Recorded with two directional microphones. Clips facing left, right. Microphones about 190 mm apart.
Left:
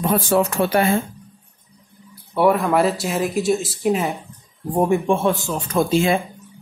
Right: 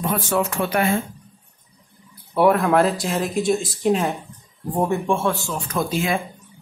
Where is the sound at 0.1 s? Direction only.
35° left (ahead or behind).